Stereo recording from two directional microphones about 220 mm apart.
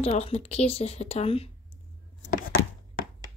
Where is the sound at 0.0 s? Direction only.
25° left (ahead or behind).